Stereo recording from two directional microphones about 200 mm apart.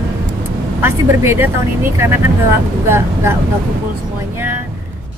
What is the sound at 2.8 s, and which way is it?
Speech, 10° right (ahead or behind).